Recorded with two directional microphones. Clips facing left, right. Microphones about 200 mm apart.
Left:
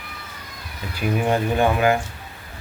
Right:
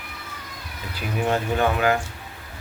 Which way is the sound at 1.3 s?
15° left (ahead or behind).